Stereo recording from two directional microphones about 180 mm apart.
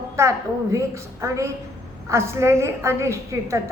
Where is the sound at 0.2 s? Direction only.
15° right (ahead or behind).